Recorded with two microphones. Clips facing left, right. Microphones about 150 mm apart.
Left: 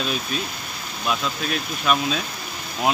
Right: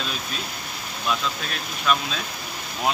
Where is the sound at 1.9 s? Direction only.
10° left (ahead or behind).